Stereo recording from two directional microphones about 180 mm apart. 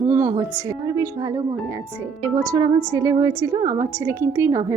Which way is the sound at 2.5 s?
25° right (ahead or behind).